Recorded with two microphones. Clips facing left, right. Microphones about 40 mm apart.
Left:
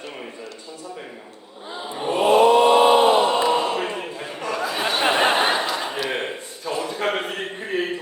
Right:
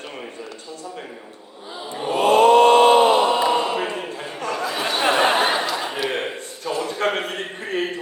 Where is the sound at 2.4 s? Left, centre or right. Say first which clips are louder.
Right 3 dB; right.